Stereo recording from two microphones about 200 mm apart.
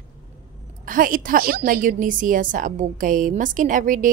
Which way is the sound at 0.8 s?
45° right (ahead or behind).